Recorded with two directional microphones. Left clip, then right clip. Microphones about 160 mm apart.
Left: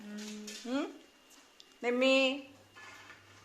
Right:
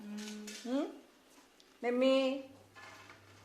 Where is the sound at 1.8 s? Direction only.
Centre (ahead or behind).